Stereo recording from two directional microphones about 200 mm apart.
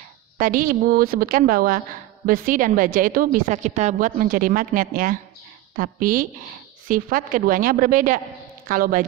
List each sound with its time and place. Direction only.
0.4 s a woman's voice: 45° right (ahead or behind)